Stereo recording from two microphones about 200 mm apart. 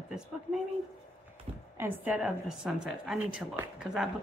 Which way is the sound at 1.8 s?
10° right (ahead or behind).